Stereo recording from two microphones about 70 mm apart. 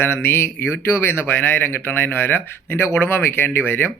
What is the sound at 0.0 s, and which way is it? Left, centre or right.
Speech, left.